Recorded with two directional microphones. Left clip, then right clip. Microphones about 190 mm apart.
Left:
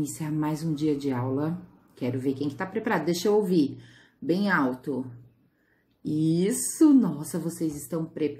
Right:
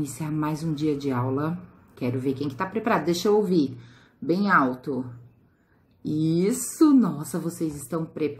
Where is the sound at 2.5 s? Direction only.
Centre (ahead or behind).